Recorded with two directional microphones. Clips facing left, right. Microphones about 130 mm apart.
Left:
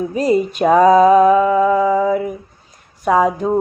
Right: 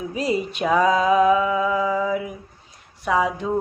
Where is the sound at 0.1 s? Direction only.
45° left (ahead or behind).